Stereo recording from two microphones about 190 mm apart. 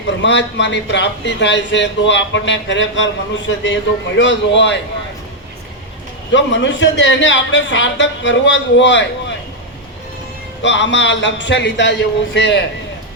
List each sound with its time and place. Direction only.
0.2 s a man's voice: 70° left (ahead or behind)
6.3 s a man's voice: 70° left (ahead or behind)
10.6 s a man's voice: 70° left (ahead or behind)